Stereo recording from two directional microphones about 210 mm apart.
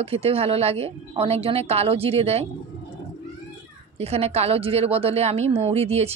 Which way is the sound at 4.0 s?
30° right (ahead or behind).